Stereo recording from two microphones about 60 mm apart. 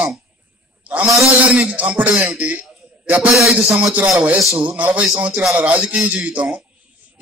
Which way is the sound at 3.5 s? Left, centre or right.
Centre.